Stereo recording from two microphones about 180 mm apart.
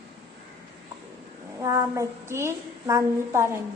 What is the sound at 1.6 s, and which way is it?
A woman's voice, 15° right (ahead or behind).